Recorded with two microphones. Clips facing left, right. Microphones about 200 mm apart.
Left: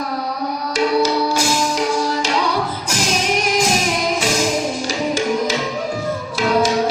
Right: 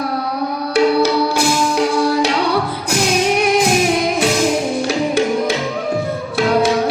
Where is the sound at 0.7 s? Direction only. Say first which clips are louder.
Right 3 dB; 60° right (ahead or behind).